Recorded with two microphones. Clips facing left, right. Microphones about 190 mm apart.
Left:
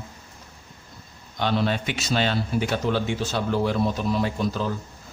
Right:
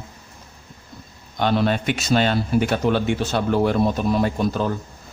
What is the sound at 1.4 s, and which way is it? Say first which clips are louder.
A man's voice: right 4 dB; 55° right (ahead or behind).